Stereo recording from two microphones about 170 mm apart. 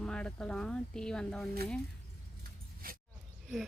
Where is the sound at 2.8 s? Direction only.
60° right (ahead or behind).